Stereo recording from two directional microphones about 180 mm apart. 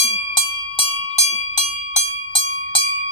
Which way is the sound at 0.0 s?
30° left (ahead or behind).